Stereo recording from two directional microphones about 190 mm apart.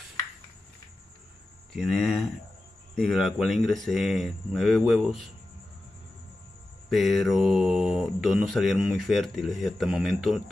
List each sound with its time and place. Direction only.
1.7 s speech: centre (ahead or behind)
6.9 s speech: centre (ahead or behind)